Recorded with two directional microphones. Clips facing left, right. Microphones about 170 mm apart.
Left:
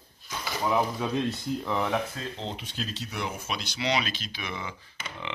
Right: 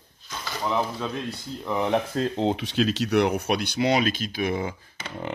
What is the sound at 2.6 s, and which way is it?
Speech, 80° right.